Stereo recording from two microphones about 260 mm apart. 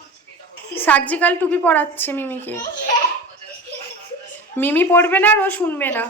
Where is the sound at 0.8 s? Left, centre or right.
Centre.